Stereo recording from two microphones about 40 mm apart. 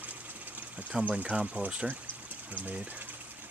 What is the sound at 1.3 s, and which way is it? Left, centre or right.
Speech, right.